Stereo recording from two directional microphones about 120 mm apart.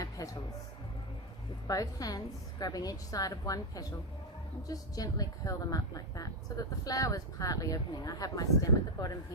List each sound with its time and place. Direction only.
0.2 s music: 30° left (ahead or behind)
1.6 s a woman's voice: 30° left (ahead or behind)